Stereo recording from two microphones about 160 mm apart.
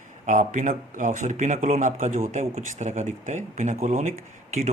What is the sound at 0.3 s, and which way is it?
Speech, 50° right (ahead or behind).